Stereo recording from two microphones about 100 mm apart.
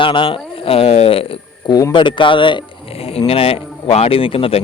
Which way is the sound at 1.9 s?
55° left (ahead or behind).